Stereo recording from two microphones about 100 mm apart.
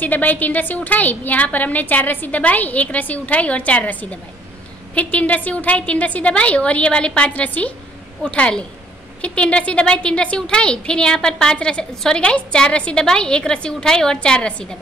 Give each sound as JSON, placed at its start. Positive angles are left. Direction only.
{"t": 0.0, "sound": "a woman's voice", "side_deg": 15}